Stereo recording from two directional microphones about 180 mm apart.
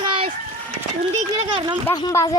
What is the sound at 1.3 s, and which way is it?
Speech, 20° right (ahead or behind).